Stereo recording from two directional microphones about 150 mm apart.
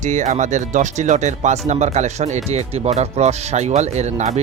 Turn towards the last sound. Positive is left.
turn(degrees=-45)  # may be behind; listen again after turning